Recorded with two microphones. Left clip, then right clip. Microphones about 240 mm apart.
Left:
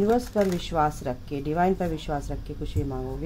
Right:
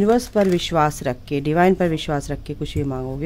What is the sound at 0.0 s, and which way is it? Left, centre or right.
Speech, right.